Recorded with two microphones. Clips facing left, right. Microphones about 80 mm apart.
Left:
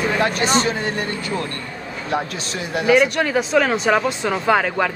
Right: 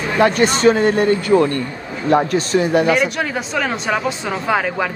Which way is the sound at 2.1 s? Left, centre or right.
Right.